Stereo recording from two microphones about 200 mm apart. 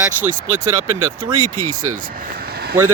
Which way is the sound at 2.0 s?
45° right (ahead or behind).